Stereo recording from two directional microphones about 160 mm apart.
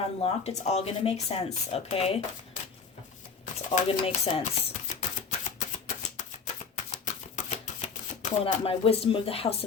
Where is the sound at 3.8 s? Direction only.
35° left (ahead or behind).